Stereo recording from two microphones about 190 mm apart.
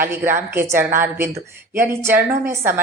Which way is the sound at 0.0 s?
10° right (ahead or behind).